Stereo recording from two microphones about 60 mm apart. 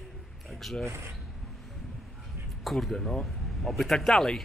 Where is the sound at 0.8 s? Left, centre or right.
Right.